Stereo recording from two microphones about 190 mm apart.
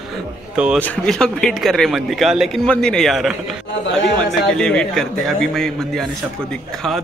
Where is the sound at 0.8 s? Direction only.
5° left (ahead or behind).